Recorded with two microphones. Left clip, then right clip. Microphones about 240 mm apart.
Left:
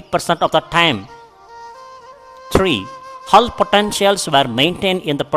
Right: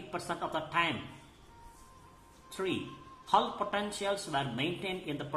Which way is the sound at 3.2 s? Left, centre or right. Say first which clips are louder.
Left 17 dB; left.